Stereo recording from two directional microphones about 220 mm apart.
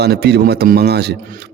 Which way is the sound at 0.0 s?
50° right (ahead or behind).